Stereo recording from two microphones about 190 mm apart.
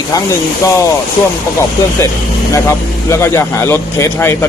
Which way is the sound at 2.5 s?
15° left (ahead or behind).